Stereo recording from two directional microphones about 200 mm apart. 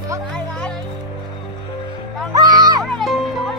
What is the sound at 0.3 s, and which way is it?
Music, 5° left (ahead or behind).